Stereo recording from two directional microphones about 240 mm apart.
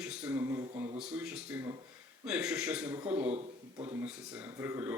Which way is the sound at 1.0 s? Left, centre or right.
Centre.